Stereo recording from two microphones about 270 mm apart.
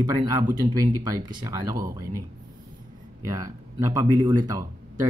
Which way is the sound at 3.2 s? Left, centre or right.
Centre.